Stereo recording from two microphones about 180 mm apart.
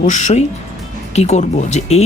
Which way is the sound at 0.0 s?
40° left (ahead or behind).